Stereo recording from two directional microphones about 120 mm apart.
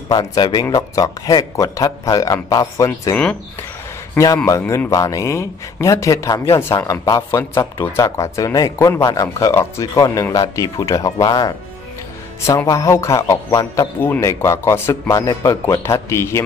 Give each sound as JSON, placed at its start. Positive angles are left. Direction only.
{"t": 0.1, "sound": "speech", "side_deg": 35}
{"t": 4.5, "sound": "speech", "side_deg": 25}
{"t": 13.9, "sound": "speech", "side_deg": 15}